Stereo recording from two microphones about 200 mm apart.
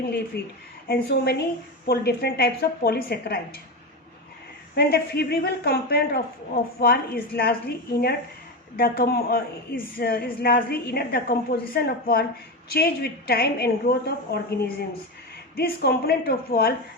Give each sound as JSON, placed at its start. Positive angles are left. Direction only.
{"t": 0.3, "sound": "a woman's voice", "side_deg": 55}
{"t": 4.7, "sound": "a woman's voice", "side_deg": 55}
{"t": 15.5, "sound": "a woman's voice", "side_deg": 50}